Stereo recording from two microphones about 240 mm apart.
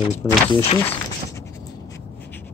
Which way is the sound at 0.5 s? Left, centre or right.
Centre.